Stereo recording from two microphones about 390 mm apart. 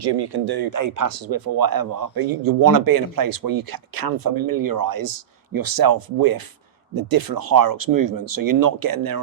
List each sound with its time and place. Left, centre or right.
0.0 s speech: right
5.0 s speech: right